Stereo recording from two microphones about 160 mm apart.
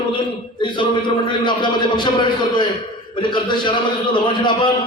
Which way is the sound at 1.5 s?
30° left (ahead or behind).